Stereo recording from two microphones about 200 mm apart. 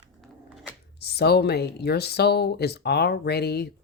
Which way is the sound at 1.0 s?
55° left (ahead or behind).